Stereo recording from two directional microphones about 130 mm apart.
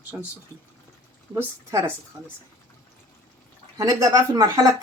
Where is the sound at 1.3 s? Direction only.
20° right (ahead or behind).